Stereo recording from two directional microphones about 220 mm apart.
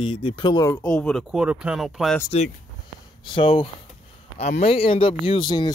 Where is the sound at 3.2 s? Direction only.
20° left (ahead or behind).